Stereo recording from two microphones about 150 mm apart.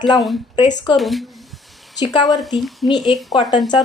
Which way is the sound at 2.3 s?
Centre (ahead or behind).